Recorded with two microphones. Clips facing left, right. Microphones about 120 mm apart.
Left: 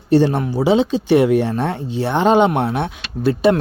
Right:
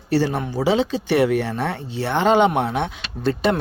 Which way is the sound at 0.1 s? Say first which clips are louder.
Left 6 dB; 20° left (ahead or behind).